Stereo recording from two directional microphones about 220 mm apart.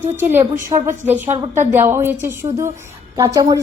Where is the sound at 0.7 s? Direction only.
15° right (ahead or behind).